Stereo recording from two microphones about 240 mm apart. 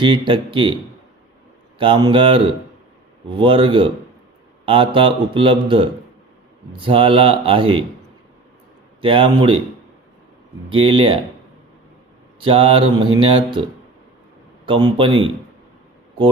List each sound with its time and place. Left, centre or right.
0.0 s speech: right
1.8 s speech: centre
9.0 s speech: right
10.7 s speech: right
12.4 s speech: right
14.7 s speech: centre